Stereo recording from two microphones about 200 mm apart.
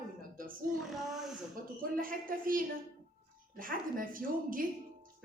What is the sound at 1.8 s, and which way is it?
Speech, 45° right (ahead or behind).